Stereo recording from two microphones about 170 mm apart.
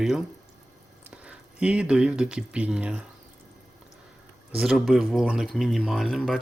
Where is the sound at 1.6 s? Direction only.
5° right (ahead or behind).